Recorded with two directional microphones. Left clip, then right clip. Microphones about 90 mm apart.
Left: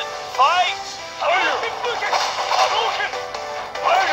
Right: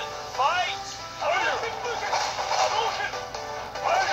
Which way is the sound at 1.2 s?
25° left (ahead or behind).